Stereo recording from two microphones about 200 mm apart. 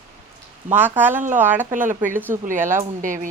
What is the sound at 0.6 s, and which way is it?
Speech, 10° right (ahead or behind).